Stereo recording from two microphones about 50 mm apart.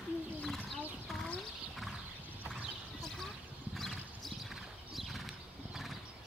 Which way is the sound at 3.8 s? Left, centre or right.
Centre.